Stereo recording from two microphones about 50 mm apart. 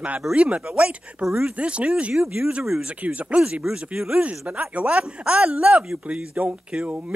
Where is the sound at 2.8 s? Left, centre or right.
Right.